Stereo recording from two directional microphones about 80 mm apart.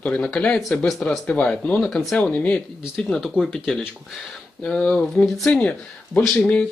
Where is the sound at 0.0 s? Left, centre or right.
Centre.